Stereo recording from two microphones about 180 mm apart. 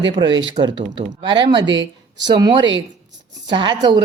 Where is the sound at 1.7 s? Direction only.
85° right.